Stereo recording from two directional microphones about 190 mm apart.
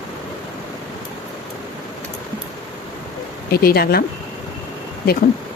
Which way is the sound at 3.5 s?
55° left (ahead or behind).